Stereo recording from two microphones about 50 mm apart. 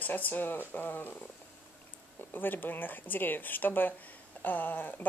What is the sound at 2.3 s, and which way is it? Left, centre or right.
Speech, left.